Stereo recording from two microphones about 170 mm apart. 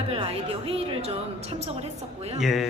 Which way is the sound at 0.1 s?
35° right (ahead or behind).